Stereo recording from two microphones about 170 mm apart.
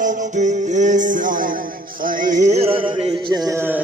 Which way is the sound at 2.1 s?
50° right (ahead or behind).